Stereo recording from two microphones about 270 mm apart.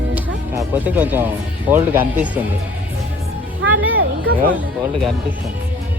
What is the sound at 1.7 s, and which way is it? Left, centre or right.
Speech, centre.